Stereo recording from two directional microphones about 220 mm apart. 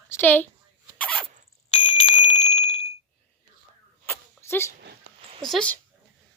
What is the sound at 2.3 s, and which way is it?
Bicycle bell, 30° left (ahead or behind).